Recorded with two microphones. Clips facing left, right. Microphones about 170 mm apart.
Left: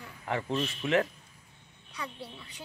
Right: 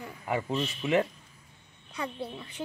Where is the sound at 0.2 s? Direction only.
10° right (ahead or behind).